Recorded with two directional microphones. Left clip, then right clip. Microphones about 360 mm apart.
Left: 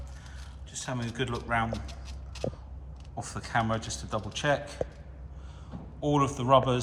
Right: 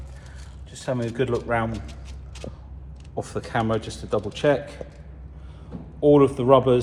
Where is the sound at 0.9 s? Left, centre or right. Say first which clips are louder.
Right 10 dB; centre.